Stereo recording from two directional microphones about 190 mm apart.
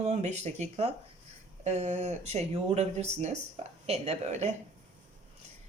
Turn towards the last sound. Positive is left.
turn(degrees=-35)  # may be behind; listen again after turning